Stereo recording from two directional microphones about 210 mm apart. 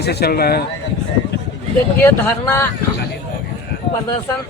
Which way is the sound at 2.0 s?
10° left (ahead or behind).